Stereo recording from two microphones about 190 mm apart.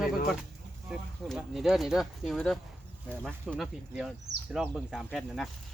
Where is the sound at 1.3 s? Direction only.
Centre (ahead or behind).